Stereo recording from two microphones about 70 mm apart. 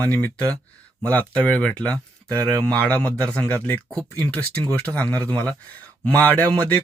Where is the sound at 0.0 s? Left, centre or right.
Left.